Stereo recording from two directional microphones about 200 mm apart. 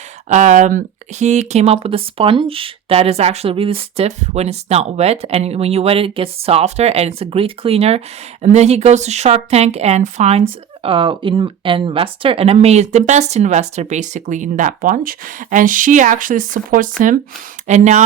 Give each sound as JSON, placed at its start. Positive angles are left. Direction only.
{"t": 0.3, "sound": "speech", "side_deg": -40}